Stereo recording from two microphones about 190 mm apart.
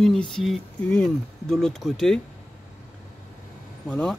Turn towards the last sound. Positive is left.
turn(degrees=5)  # may be behind; listen again after turning